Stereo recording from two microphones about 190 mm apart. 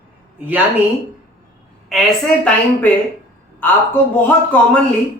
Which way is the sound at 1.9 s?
5° left (ahead or behind).